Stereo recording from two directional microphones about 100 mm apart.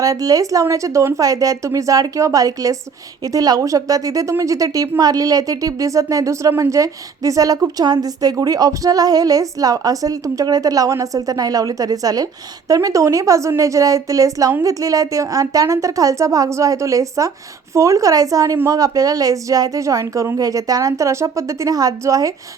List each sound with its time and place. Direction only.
0.0 s a woman's voice: 35° right (ahead or behind)